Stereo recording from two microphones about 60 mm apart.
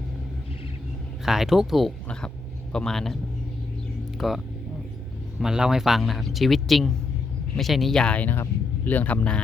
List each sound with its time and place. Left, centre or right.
1.2 s speech: centre
2.7 s speech: centre
4.2 s speech: centre
5.4 s speech: centre
8.1 s speech: left